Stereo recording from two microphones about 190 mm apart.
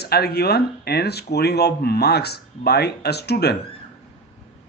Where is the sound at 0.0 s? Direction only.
55° left (ahead or behind).